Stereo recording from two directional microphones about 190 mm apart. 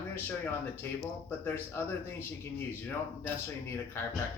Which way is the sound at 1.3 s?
10° left (ahead or behind).